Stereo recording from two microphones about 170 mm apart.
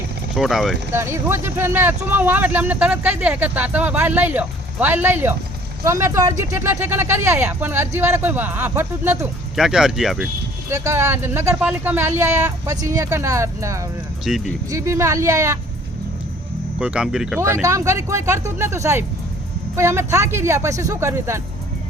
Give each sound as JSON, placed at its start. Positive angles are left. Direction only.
{"t": 0.3, "sound": "speech", "side_deg": 0}
{"t": 0.9, "sound": "speech", "side_deg": -15}
{"t": 10.7, "sound": "speech", "side_deg": -15}
{"t": 14.3, "sound": "speech", "side_deg": 0}
{"t": 14.7, "sound": "speech", "side_deg": -15}
{"t": 16.8, "sound": "speech", "side_deg": -5}
{"t": 17.4, "sound": "speech", "side_deg": -15}